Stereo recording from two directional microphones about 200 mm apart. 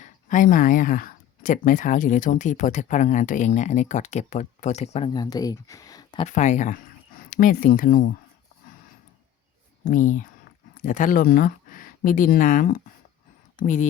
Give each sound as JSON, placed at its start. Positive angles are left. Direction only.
{"t": 0.0, "sound": "speech", "side_deg": 40}
{"t": 6.2, "sound": "speech", "side_deg": 35}
{"t": 9.8, "sound": "speech", "side_deg": 40}